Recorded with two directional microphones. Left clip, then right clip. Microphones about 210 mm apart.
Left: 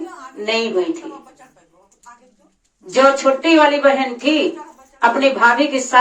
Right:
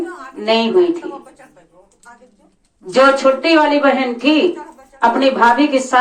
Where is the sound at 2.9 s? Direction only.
30° right (ahead or behind).